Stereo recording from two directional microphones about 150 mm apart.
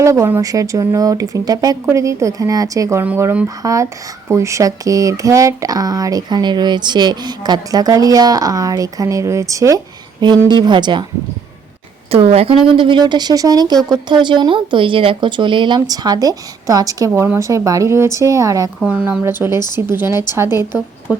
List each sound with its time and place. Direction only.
0.0 s speech: 20° right (ahead or behind)
12.1 s speech: 40° right (ahead or behind); by 18.7 s 20° right (ahead or behind)
18.8 s a woman's voice: 5° right (ahead or behind)